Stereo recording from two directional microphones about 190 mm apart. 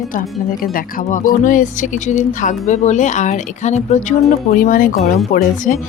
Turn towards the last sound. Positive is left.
turn(degrees=40)  # may be behind; listen again after turning